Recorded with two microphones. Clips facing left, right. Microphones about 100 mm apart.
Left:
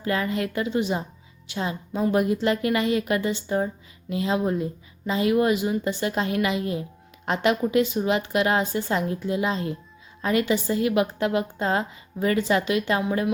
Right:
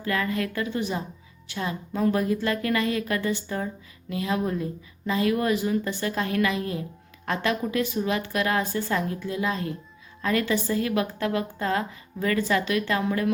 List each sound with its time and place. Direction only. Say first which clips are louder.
0.0 s a woman's voice: left 1 dB; 25° left (ahead or behind)